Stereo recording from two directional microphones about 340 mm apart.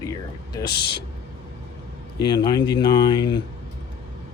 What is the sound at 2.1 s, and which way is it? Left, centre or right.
Speech, centre.